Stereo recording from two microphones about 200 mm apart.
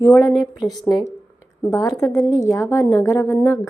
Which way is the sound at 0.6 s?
Centre (ahead or behind).